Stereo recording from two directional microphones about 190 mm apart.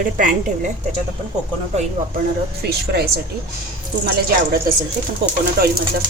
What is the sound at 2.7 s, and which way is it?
Speech, 55° right (ahead or behind).